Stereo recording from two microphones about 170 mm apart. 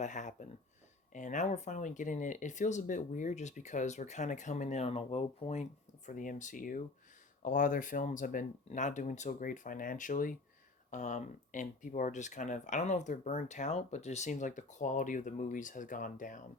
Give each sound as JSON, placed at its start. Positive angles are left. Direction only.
{"t": 0.0, "sound": "speech", "side_deg": 45}
{"t": 6.1, "sound": "speech", "side_deg": 50}